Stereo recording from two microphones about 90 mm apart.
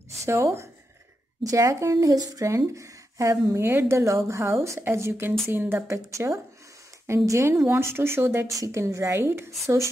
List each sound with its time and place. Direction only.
0.2 s speech: 30° right (ahead or behind)
5.9 s speech: 35° right (ahead or behind)